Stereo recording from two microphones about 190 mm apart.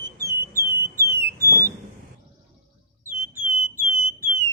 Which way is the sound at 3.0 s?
10° right (ahead or behind).